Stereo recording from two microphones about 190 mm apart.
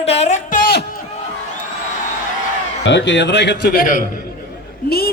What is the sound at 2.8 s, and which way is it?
A woman's voice, 65° left (ahead or behind).